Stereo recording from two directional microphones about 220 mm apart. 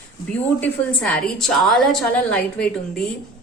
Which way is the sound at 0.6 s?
5° left (ahead or behind).